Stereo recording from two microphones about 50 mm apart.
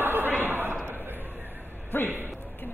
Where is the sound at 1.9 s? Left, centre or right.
Left.